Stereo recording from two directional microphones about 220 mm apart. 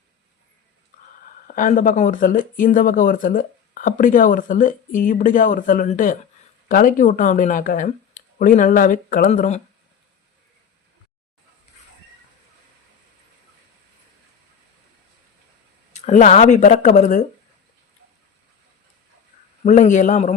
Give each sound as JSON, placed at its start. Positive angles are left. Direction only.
{"t": 1.5, "sound": "speech", "side_deg": 35}
{"t": 15.9, "sound": "speech", "side_deg": 30}
{"t": 19.6, "sound": "speech", "side_deg": 35}